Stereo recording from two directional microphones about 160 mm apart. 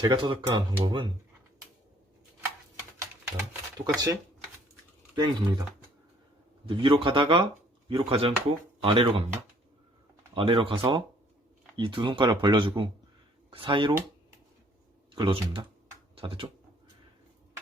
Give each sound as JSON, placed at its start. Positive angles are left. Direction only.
{"t": 0.1, "sound": "speech", "side_deg": -30}
{"t": 3.8, "sound": "speech", "side_deg": -20}
{"t": 6.7, "sound": "speech", "side_deg": -30}
{"t": 15.1, "sound": "speech", "side_deg": -30}